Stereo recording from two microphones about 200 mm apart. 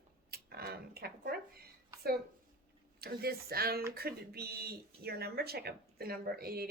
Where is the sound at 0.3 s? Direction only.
50° right (ahead or behind).